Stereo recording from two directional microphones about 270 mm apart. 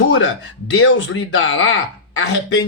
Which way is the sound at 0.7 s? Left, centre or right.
Left.